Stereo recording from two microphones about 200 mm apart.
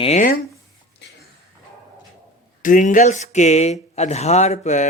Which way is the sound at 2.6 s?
40° left (ahead or behind).